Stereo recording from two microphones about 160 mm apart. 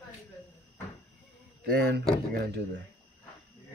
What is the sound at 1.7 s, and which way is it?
Speech, 90° right.